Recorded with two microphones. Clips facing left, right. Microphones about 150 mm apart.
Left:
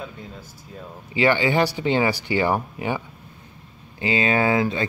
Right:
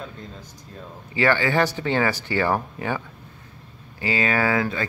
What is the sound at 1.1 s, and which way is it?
Speech, 15° left (ahead or behind).